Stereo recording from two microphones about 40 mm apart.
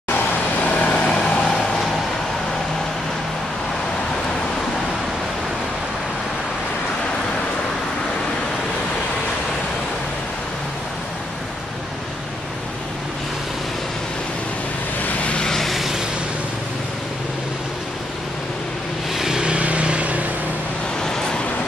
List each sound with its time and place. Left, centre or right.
0.7 s vehicle: left
15.3 s vehicle: centre
15.7 s vehicle: centre
19.1 s vehicle: centre
19.4 s vehicle: right
21.0 s vehicle: centre